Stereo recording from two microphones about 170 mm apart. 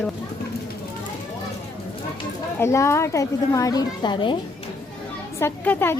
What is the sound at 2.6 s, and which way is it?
Speech, 15° left (ahead or behind).